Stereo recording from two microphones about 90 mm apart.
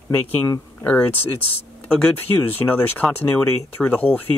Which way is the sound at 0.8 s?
20° left (ahead or behind).